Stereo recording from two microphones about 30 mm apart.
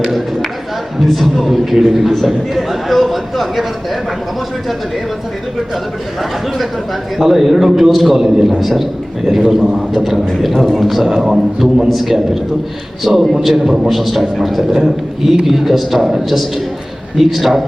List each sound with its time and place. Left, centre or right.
0.9 s a man's voice: centre
7.2 s a man's voice: centre
8.1 s a man's voice: centre
8.4 s a man's voice: centre
11.0 s a man's voice: centre
11.9 s a man's voice: centre
13.1 s a man's voice: centre
13.4 s a man's voice: centre